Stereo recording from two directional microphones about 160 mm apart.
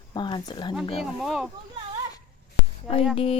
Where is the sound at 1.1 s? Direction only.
5° right (ahead or behind).